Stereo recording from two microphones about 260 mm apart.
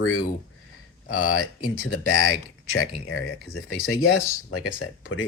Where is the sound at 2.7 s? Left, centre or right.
Left.